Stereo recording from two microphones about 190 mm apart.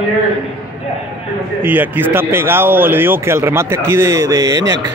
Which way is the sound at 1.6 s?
10° right (ahead or behind).